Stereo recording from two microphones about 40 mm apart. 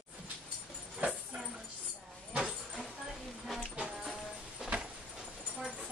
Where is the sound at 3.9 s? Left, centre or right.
Centre.